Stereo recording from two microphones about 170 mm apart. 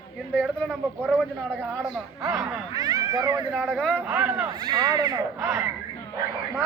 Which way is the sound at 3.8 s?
5° left (ahead or behind).